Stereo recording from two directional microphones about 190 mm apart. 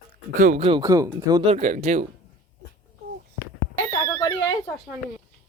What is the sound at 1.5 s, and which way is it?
Speech, 35° right (ahead or behind).